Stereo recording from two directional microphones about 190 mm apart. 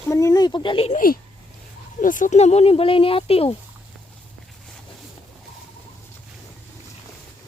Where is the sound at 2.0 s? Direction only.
45° left (ahead or behind).